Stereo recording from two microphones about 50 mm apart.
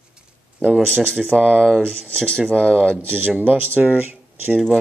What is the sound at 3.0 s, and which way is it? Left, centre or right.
Speech, right.